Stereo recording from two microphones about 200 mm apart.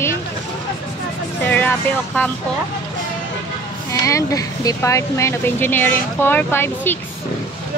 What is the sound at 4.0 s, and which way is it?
Speech, 15° left (ahead or behind).